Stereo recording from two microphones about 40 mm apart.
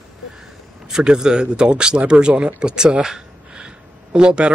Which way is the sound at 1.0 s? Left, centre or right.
Centre.